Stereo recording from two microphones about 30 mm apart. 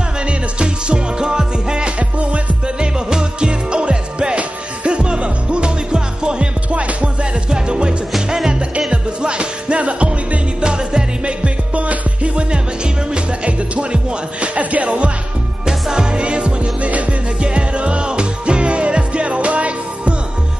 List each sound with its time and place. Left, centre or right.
0.3 s music: right
2.0 s music: right
2.8 s music: right
7.4 s music: right
8.9 s music: right
10.6 s music: right
11.2 s music: right
12.4 s music: right
15.6 s music: right
16.8 s music: right
17.4 s music: right